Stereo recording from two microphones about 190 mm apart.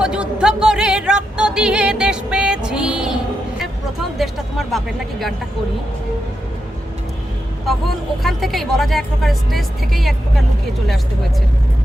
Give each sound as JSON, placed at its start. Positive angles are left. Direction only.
{"t": 0.0, "sound": "music", "side_deg": -5}
{"t": 4.2, "sound": "speech", "side_deg": 0}
{"t": 7.7, "sound": "speech", "side_deg": 0}